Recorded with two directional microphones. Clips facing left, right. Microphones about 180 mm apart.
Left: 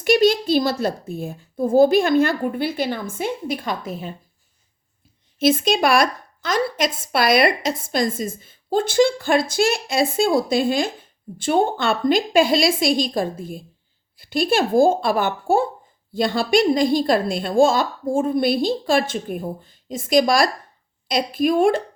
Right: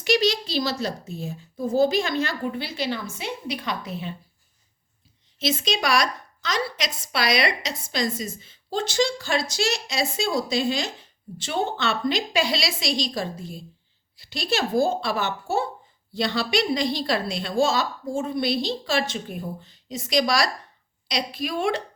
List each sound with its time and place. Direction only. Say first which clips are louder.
0.0 s a woman's voice: left 6 dB; 50° left (ahead or behind)
5.4 s a woman's voice: left 8 dB; 55° left (ahead or behind)